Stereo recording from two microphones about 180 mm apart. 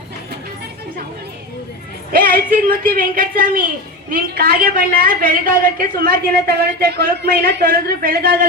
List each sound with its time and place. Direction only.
2.1 s a woman's voice: 55° right (ahead or behind)